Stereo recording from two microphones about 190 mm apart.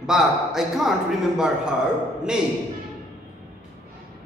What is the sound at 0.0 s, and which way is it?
Speech, centre (ahead or behind).